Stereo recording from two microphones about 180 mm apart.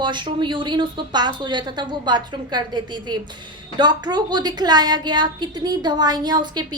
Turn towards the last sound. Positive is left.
turn(degrees=-25)  # may be behind; listen again after turning